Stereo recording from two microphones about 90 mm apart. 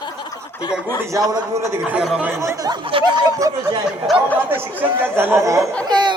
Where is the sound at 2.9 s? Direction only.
80° right.